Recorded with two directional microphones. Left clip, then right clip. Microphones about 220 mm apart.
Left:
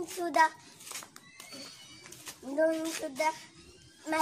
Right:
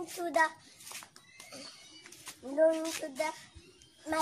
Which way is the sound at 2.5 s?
5° right (ahead or behind).